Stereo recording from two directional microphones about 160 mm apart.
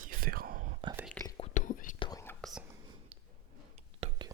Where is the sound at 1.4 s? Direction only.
50° left (ahead or behind).